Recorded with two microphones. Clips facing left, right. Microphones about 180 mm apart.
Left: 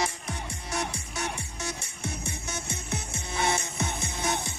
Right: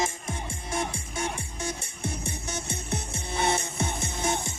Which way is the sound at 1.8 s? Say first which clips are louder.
Right 2 dB; 55° right (ahead or behind).